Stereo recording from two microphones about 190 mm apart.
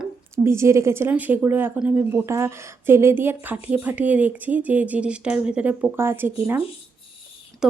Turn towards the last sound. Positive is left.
turn(degrees=-5)  # may be behind; listen again after turning